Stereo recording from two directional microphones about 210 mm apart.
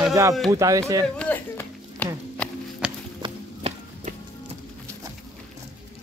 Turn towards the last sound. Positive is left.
turn(degrees=-30)  # may be behind; listen again after turning